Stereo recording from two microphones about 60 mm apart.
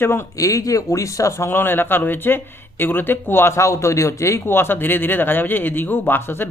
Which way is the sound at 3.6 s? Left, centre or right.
Left.